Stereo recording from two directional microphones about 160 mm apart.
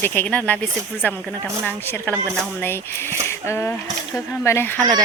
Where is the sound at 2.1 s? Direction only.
15° right (ahead or behind).